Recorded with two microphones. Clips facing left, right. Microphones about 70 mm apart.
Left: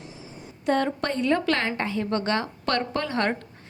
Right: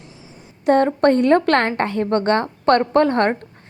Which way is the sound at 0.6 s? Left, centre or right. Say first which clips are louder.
Right 9 dB; right.